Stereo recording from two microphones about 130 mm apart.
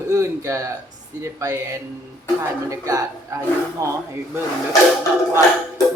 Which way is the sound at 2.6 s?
25° right (ahead or behind).